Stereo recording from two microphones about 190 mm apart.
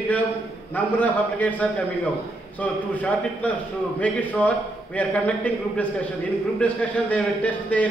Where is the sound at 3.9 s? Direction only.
5° left (ahead or behind).